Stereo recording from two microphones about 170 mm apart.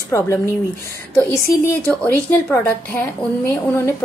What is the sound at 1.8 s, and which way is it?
A woman's voice, 10° left (ahead or behind).